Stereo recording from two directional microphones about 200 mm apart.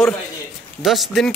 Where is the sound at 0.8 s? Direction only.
Centre (ahead or behind).